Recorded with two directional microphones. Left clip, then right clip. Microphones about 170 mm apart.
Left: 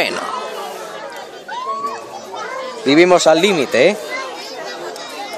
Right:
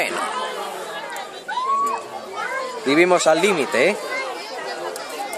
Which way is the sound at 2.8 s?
30° left (ahead or behind).